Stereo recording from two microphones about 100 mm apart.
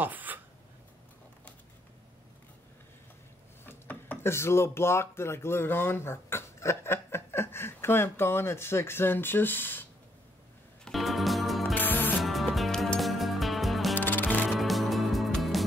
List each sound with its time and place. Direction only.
0.0 s a sound: 15° right (ahead or behind)
3.6 s speech: 20° left (ahead or behind)
10.9 s music: centre (ahead or behind)
11.7 s music: 20° left (ahead or behind)
12.2 s music: centre (ahead or behind)
13.9 s music: 20° left (ahead or behind)
14.5 s music: centre (ahead or behind)